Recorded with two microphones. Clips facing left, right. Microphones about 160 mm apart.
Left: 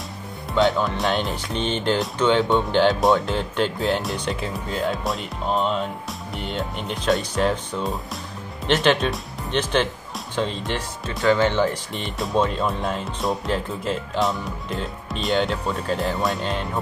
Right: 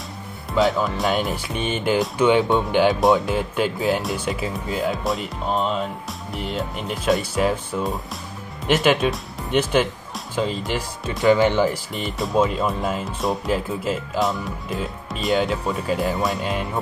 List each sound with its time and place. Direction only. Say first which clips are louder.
0.6 s speech: even; centre (ahead or behind)